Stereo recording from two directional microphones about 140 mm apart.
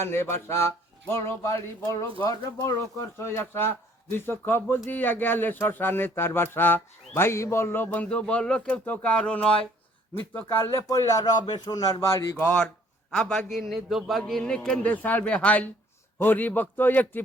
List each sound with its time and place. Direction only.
0.0 s speech: 15° left (ahead or behind)
10.3 s speech: 20° left (ahead or behind)
12.4 s speech: 10° left (ahead or behind)